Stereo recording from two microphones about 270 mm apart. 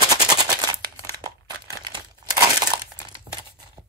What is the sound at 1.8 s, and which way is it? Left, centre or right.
Crumpling, centre.